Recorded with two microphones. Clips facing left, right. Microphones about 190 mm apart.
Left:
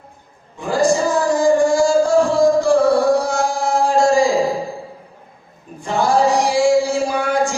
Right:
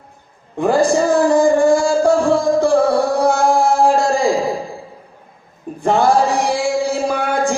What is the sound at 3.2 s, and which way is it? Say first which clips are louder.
Carnatic music: right 5 dB; 60° right (ahead or behind).